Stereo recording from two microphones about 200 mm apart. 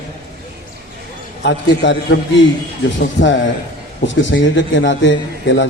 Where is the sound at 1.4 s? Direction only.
60° left (ahead or behind).